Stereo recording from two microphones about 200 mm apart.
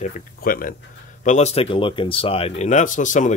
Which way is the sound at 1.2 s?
35° left (ahead or behind).